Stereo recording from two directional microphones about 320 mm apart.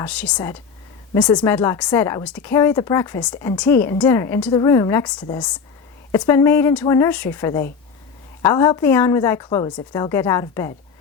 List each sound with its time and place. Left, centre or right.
0.0 s speech: centre